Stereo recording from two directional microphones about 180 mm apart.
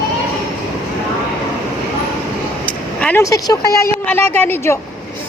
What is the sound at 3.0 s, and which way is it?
Speech, 15° left (ahead or behind).